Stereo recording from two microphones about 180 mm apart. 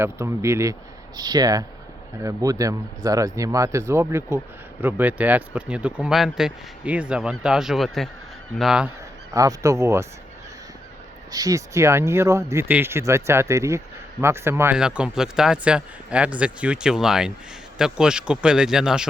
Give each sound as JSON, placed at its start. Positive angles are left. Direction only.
{"t": 0.0, "sound": "speech", "side_deg": -15}
{"t": 9.3, "sound": "speech", "side_deg": -20}
{"t": 11.3, "sound": "speech", "side_deg": -20}